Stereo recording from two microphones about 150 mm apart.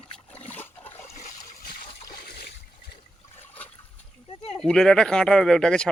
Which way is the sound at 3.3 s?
15° left (ahead or behind).